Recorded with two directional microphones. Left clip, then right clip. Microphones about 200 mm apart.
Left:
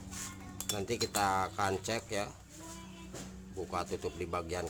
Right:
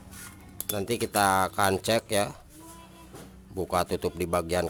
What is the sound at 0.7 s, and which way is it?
Speech, 40° right (ahead or behind).